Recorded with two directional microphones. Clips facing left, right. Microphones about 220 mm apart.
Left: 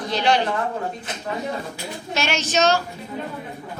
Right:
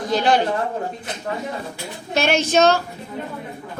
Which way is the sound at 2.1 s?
55° right (ahead or behind).